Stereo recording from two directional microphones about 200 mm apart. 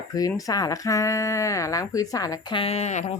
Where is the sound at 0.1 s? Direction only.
15° left (ahead or behind).